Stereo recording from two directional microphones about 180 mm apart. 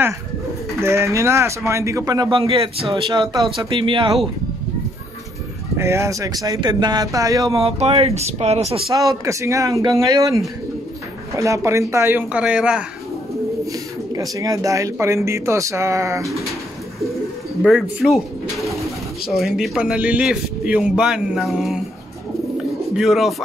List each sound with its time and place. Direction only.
0.7 s speech: 15° right (ahead or behind)
5.8 s speech: 15° right (ahead or behind)
7.5 s speech: 35° right (ahead or behind)
8.9 s speech: 20° right (ahead or behind)
13.7 s speech: 20° right (ahead or behind)
17.6 s a man's voice: centre (ahead or behind)
22.9 s a man's voice: centre (ahead or behind)